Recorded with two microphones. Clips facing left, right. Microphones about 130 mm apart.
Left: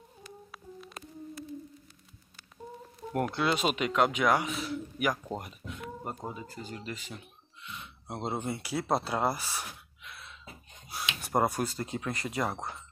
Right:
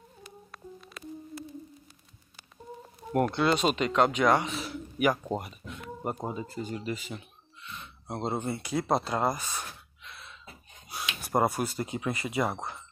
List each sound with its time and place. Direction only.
0.5 s a sound: centre (ahead or behind)
3.1 s speech: centre (ahead or behind)
5.4 s a sound: 5° right (ahead or behind)
6.2 s speech: 25° right (ahead or behind)
6.7 s speech: 10° right (ahead or behind)
7.6 s gasp: 10° left (ahead or behind)
8.7 s speech: 5° left (ahead or behind)
9.6 s gasp: 5° left (ahead or behind)
11.1 s speech: centre (ahead or behind)